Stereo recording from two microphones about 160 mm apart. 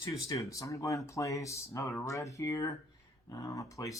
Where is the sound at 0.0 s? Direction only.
20° left (ahead or behind).